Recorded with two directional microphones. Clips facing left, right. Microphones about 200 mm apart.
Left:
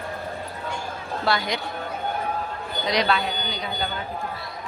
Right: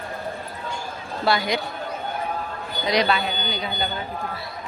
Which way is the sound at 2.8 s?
Centre (ahead or behind).